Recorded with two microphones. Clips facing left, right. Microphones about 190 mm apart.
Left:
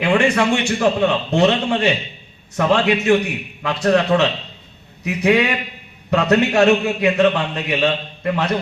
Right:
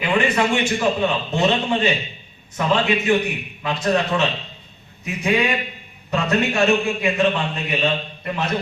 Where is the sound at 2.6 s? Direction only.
70° left (ahead or behind).